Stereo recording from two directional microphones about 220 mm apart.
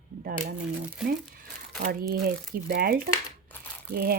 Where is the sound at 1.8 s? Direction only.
40° right (ahead or behind).